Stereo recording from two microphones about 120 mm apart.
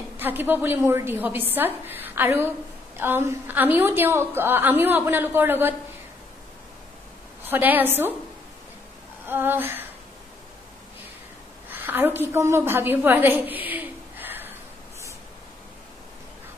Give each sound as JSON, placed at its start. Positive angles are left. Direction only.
{"t": 0.2, "sound": "a woman's voice", "side_deg": -15}
{"t": 7.4, "sound": "a woman's voice", "side_deg": -15}
{"t": 9.3, "sound": "a woman's voice", "side_deg": -15}
{"t": 11.7, "sound": "a woman's voice", "side_deg": -15}